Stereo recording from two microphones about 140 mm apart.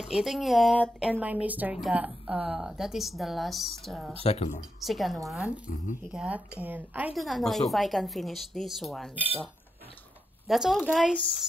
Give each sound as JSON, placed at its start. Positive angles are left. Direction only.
{"t": 0.0, "sound": "a woman's voice", "side_deg": -5}
{"t": 1.2, "sound": "a woman's voice", "side_deg": -10}
{"t": 4.1, "sound": "speech", "side_deg": 45}
{"t": 4.8, "sound": "a woman's voice", "side_deg": 0}
{"t": 7.2, "sound": "a woman's voice", "side_deg": 0}
{"t": 10.4, "sound": "a woman's voice", "side_deg": 0}